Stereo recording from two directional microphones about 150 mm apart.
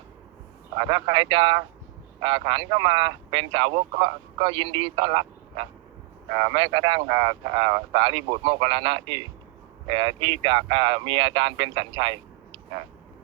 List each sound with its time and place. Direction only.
0.8 s speech: 35° right (ahead or behind)